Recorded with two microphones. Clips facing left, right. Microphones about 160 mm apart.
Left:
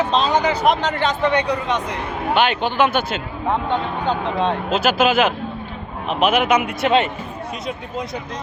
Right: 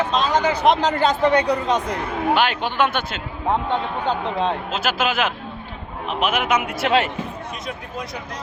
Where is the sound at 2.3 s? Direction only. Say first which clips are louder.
Left 3 dB; centre (ahead or behind).